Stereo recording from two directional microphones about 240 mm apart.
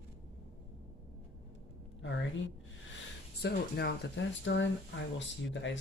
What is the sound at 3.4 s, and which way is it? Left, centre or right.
Speech, left.